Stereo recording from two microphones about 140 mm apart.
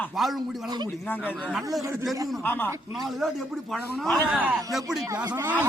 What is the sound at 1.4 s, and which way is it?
Speech, centre (ahead or behind).